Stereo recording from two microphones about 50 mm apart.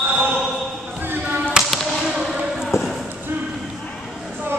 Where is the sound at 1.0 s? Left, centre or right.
Right.